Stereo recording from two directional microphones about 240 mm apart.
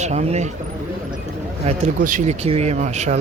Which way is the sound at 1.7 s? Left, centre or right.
Right.